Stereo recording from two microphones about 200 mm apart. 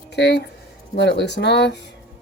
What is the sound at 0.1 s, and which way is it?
Speech, 60° left (ahead or behind).